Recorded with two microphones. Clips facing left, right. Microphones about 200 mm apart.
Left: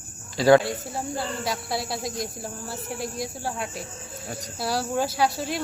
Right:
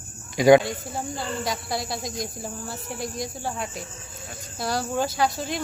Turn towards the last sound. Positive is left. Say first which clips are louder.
# even
turn(degrees=5)  # may be behind; listen again after turning